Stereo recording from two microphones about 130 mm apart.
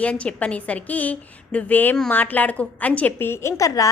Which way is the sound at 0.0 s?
10° left (ahead or behind).